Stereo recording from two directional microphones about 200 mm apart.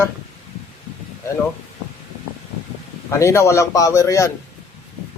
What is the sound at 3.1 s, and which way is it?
Speech, 15° left (ahead or behind).